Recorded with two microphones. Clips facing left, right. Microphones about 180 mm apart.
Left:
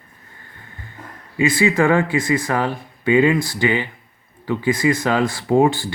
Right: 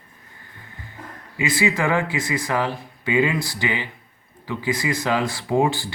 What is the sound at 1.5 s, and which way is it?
Speech, 50° left (ahead or behind).